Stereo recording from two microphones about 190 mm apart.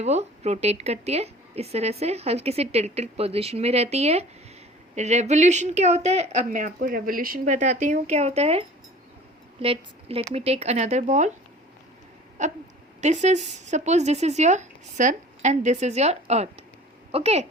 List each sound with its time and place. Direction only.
0.0 s a woman's voice: 35° right (ahead or behind)
6.5 s a woman's voice: 45° right (ahead or behind)
12.4 s a woman's voice: 40° right (ahead or behind)